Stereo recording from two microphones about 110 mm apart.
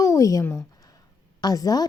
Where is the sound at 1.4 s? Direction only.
35° left (ahead or behind).